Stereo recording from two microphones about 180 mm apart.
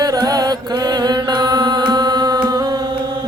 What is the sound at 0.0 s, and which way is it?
Mantra, 20° right (ahead or behind).